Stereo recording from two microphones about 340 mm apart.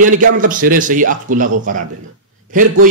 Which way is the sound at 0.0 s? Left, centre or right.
Right.